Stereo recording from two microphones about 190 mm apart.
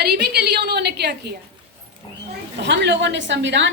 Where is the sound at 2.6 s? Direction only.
65° right (ahead or behind).